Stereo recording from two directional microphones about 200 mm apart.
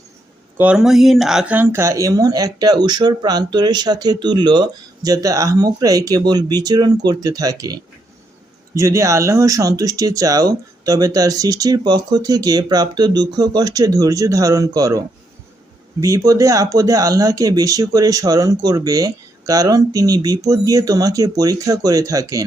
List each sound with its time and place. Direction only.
0.5 s speech: 5° right (ahead or behind)